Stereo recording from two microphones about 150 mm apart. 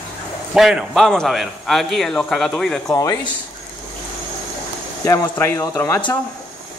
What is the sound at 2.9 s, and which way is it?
Speech, 20° left (ahead or behind).